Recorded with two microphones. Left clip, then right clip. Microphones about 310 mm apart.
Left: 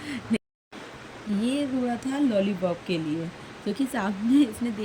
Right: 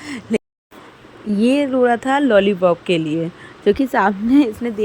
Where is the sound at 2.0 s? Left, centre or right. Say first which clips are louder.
Right 12 dB; centre.